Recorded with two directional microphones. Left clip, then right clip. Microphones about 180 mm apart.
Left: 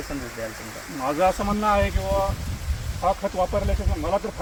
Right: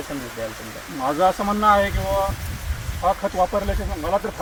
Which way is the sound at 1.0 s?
5° left (ahead or behind).